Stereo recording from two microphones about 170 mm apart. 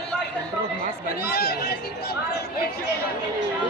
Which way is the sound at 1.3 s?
70° left (ahead or behind).